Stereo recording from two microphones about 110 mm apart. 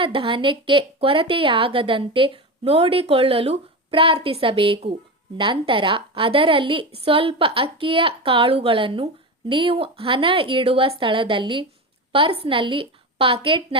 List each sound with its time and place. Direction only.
0.0 s a woman's voice: 50° right (ahead or behind)